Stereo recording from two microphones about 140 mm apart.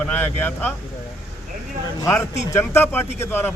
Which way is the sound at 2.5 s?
15° left (ahead or behind).